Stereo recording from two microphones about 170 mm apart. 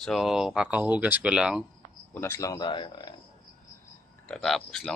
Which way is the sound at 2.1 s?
15° left (ahead or behind).